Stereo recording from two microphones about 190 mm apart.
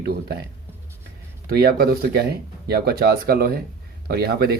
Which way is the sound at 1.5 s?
55° right (ahead or behind).